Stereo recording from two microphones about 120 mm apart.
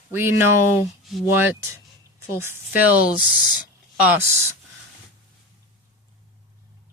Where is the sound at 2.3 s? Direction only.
20° right (ahead or behind).